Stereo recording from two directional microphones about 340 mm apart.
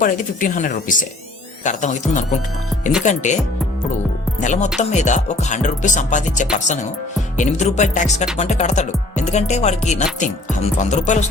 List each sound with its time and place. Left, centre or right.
0.0 s music: left
4.4 s music: left